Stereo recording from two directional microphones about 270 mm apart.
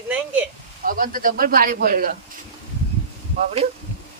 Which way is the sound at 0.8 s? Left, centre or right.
Right.